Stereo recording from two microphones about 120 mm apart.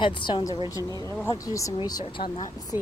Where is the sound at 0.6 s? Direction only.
30° left (ahead or behind).